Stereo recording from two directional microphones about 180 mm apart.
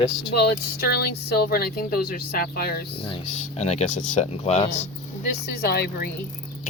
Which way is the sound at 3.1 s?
35° left (ahead or behind).